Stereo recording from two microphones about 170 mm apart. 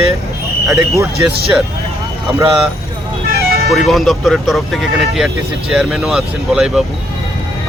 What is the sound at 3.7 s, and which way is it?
Speech, centre (ahead or behind).